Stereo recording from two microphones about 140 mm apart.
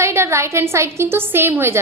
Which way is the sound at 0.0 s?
20° right (ahead or behind).